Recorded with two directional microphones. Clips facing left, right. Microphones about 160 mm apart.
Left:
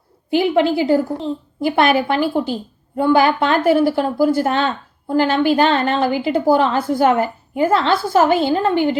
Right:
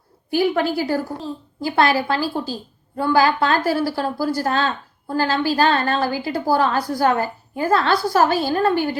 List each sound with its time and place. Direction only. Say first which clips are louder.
0.3 s a woman's voice: left 4 dB; 20° left (ahead or behind)